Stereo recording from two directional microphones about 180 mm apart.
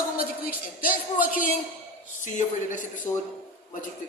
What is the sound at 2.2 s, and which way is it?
Speech, 40° left (ahead or behind).